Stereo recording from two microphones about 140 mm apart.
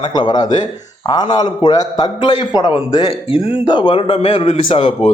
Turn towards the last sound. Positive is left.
turn(degrees=40)  # may be behind; listen again after turning